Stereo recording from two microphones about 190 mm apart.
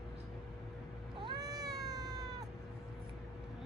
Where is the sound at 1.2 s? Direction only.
20° right (ahead or behind).